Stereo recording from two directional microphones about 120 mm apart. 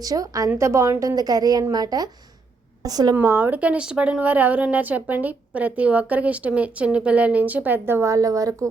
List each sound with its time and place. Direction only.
0.0 s a woman's voice: 30° right (ahead or behind)
3.2 s a woman's voice: 15° right (ahead or behind)